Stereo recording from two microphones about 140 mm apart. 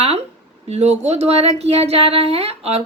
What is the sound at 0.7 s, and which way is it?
A woman's voice, 50° right (ahead or behind).